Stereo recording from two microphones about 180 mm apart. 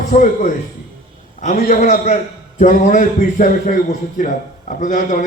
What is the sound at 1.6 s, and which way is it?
A man's voice, 55° left (ahead or behind).